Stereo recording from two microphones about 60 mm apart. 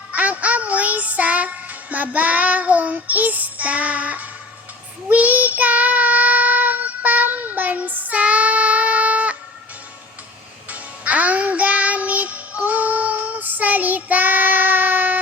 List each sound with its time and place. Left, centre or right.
0.1 s child singing: right
10.7 s music: right